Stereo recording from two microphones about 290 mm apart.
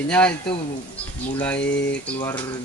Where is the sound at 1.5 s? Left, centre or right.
Left.